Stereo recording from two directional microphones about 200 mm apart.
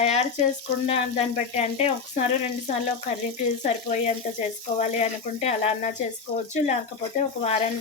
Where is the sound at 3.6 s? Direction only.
35° left (ahead or behind).